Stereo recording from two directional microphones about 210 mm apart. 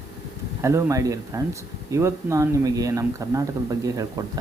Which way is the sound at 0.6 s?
15° right (ahead or behind).